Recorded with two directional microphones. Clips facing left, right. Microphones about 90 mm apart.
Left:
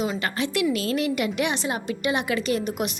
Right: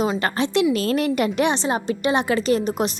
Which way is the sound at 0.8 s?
45° right (ahead or behind).